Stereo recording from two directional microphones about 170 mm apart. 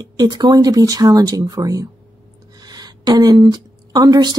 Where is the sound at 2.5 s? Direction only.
20° right (ahead or behind).